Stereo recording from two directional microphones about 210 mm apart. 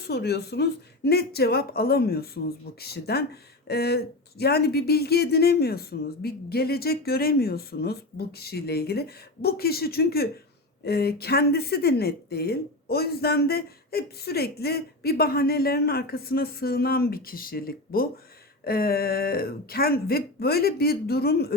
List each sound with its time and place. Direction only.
0.0 s speech: 50° left (ahead or behind)